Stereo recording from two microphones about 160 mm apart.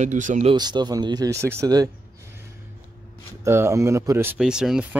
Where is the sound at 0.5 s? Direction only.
25° right (ahead or behind).